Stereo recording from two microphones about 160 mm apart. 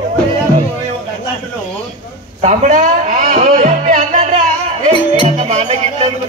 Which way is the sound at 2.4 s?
55° right (ahead or behind).